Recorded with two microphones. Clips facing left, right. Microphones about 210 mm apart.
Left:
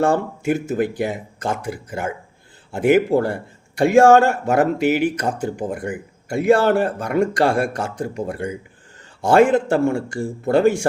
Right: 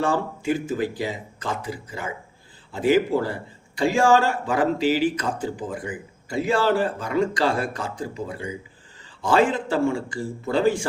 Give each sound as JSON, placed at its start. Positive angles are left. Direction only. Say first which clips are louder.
{"t": 0.0, "sound": "speech", "louder": "left 5 dB", "side_deg": 45}
{"t": 5.7, "sound": "speech", "louder": "left 5 dB", "side_deg": 65}
{"t": 9.2, "sound": "speech", "louder": "left 6 dB", "side_deg": 55}